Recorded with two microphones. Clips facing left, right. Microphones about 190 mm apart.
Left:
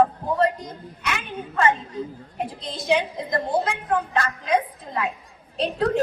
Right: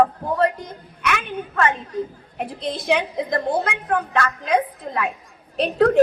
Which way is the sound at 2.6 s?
65° right (ahead or behind).